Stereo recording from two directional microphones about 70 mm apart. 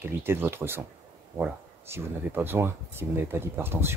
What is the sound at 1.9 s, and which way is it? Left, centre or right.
Speech, right.